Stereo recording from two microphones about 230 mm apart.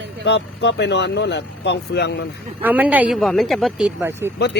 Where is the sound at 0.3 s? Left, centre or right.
Left.